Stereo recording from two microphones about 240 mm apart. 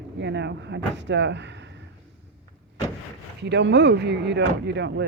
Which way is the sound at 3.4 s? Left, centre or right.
Right.